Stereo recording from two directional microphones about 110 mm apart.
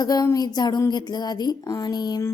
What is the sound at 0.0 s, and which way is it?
A woman's voice, 35° left (ahead or behind).